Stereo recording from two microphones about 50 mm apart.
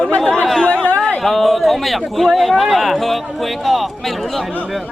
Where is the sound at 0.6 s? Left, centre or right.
Left.